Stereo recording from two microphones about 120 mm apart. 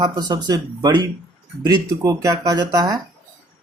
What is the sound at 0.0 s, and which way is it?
Speech, 35° right (ahead or behind).